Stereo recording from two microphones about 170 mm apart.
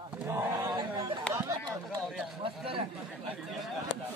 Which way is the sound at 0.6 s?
25° right (ahead or behind).